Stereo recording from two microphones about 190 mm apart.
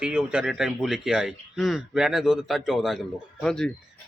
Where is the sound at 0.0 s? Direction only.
5° right (ahead or behind).